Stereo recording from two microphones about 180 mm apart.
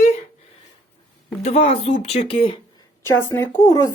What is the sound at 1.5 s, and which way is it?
Speech, 35° left (ahead or behind).